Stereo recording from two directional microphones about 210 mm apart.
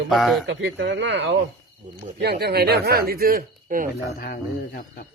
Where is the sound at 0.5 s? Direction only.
65° right (ahead or behind); by 3.9 s 40° right (ahead or behind).